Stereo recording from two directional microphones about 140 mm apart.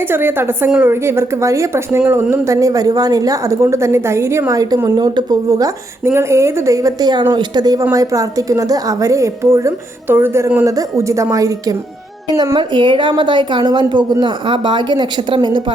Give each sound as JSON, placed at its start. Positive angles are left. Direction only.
{"t": 0.0, "sound": "a woman's voice", "side_deg": -15}